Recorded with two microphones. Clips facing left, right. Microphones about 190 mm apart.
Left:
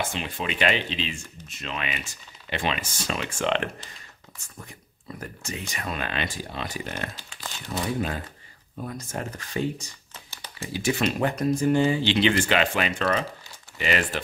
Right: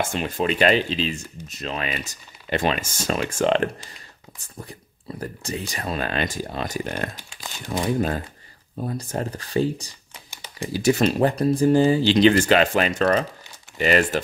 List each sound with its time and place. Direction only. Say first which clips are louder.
0.1 s speech: right 7 dB; 45° right (ahead or behind)
7.2 s speech: right 1 dB; 15° right (ahead or behind)
7.7 s speech: right 5 dB; 45° right (ahead or behind)
8.7 s speech: right 5 dB; 30° right (ahead or behind)
10.1 s a sound: right 5 dB; 15° right (ahead or behind)
10.7 s speech: right 6 dB; 40° right (ahead or behind)